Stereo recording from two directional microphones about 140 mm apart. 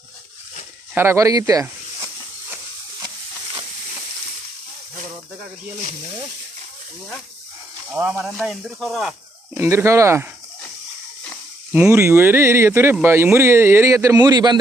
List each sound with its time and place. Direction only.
0.9 s speech: 20° right (ahead or behind)
7.9 s speech: 10° right (ahead or behind)
9.6 s speech: 20° right (ahead or behind)
11.7 s speech: 15° right (ahead or behind); by 14.6 s 30° right (ahead or behind)